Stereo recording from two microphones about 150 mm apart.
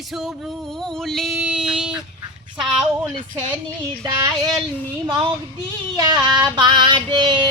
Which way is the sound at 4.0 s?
25° right (ahead or behind).